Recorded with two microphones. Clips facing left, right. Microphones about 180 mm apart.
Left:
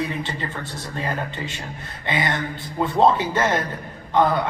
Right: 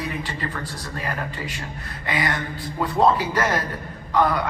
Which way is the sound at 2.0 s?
25° left (ahead or behind).